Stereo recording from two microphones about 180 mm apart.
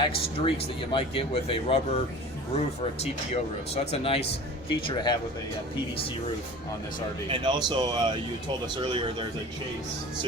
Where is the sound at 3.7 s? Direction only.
35° left (ahead or behind).